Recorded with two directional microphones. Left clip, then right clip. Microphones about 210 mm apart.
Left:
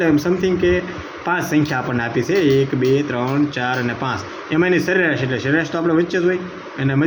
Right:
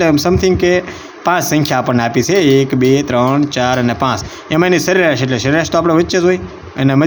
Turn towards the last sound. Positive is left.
turn(degrees=-50)  # may be behind; listen again after turning